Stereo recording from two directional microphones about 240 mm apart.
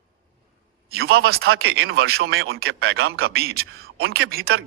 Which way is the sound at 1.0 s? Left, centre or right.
Right.